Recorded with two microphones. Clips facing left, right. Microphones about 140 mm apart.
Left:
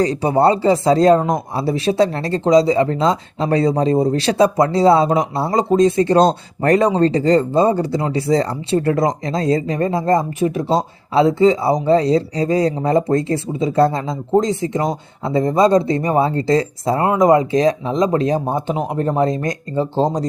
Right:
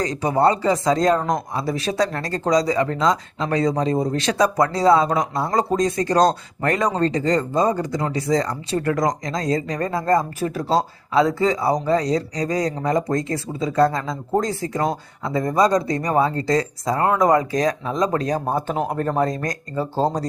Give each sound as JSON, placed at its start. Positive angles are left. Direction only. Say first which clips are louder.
{"t": 0.0, "sound": "speech", "louder": "left 4 dB", "side_deg": 30}